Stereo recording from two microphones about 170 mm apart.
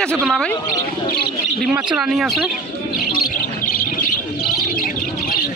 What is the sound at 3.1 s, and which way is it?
Bird, 55° left (ahead or behind).